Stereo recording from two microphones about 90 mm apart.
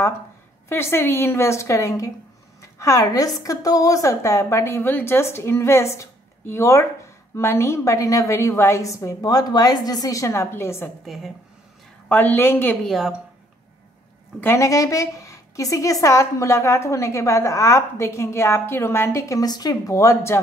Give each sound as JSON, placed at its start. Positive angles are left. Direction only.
{"t": 0.7, "sound": "a woman's voice", "side_deg": 25}
{"t": 12.1, "sound": "a woman's voice", "side_deg": 20}
{"t": 12.8, "sound": "a woman's voice", "side_deg": 0}
{"t": 14.4, "sound": "a woman's voice", "side_deg": 25}
{"t": 14.7, "sound": "a woman's voice", "side_deg": 40}